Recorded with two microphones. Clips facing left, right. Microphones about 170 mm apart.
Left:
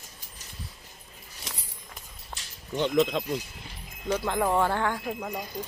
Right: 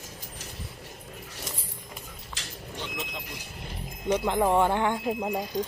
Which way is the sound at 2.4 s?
90° right.